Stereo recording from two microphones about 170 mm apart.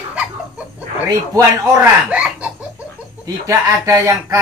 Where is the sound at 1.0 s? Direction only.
20° right (ahead or behind).